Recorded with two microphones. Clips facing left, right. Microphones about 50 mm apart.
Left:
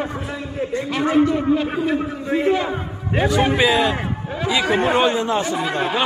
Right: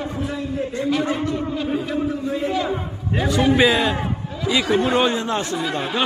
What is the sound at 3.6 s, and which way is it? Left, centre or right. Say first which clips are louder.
Speech: even; centre.